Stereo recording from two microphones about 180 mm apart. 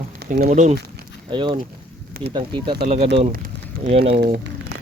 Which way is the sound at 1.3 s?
25° right (ahead or behind).